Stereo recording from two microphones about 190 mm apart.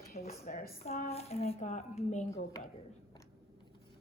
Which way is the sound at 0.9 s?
35° left (ahead or behind).